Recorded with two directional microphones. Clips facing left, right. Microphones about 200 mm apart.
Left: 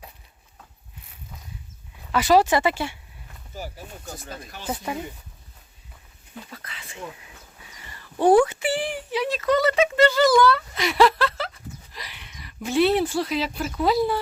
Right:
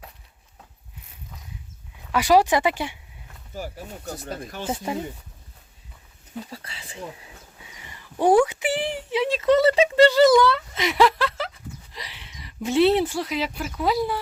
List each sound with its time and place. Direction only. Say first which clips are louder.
2.1 s speech: even; 15° right (ahead or behind)
4.2 s speech: right 5 dB; 40° right (ahead or behind)
4.6 s speech: right 1 dB; 25° right (ahead or behind)
6.5 s a sound: right 2 dB; 30° right (ahead or behind)
8.2 s speech: left 1 dB; 10° right (ahead or behind)